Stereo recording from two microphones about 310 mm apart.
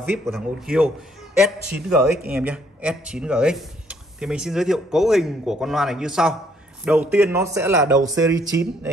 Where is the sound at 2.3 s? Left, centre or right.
Centre.